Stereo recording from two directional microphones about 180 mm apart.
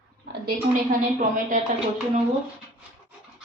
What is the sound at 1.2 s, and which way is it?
Speech, 45° right (ahead or behind).